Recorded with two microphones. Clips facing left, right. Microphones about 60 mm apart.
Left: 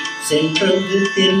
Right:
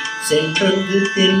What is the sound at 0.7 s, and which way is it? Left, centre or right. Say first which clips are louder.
Music: left 1 dB; right.